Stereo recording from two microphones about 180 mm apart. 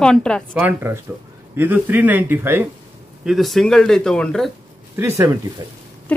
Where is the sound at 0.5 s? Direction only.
15° right (ahead or behind).